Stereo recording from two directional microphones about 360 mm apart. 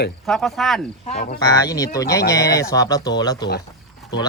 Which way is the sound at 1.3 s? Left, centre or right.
Centre.